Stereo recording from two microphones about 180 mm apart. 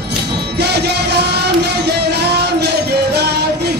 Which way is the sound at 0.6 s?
65° right (ahead or behind).